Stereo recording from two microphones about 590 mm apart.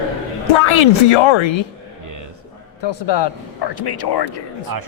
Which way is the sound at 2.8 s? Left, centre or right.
Left.